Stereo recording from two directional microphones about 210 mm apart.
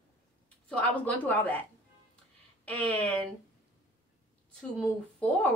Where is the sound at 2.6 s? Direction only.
5° left (ahead or behind).